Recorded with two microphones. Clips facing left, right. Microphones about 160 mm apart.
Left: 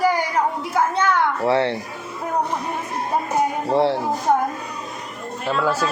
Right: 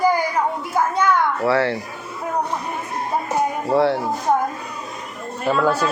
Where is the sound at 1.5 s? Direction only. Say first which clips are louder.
Even; 20° left (ahead or behind).